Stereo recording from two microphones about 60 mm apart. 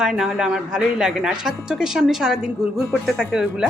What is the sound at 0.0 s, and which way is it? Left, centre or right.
Speech, centre.